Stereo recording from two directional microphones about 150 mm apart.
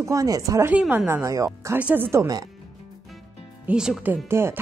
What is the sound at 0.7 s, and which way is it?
Speech, 5° right (ahead or behind).